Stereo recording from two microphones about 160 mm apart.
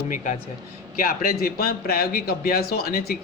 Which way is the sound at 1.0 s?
65° left (ahead or behind).